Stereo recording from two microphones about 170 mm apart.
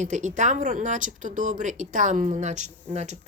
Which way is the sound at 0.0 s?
45° right (ahead or behind).